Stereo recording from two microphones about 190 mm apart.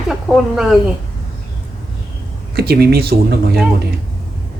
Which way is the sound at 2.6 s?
55° right (ahead or behind).